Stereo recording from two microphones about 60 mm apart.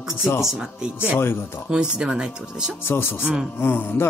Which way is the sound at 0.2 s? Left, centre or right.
Left.